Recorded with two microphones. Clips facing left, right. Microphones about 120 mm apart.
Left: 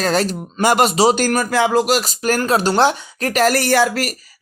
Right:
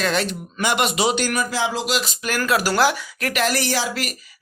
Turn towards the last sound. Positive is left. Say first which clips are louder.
# left 8 dB
turn(degrees=50)  # may be behind; listen again after turning